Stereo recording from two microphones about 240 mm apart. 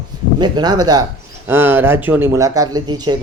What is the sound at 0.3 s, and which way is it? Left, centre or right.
Speech, centre.